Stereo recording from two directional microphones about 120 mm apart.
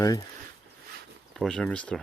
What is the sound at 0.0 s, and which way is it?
Speech, 30° left (ahead or behind).